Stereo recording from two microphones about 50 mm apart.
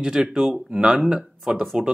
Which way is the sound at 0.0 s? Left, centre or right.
Centre.